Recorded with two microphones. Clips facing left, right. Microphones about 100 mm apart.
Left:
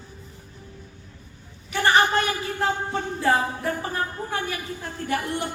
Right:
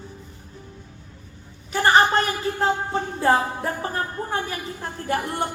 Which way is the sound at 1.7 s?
35° right (ahead or behind).